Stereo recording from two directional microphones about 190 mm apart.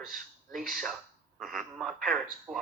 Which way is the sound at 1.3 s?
Centre (ahead or behind).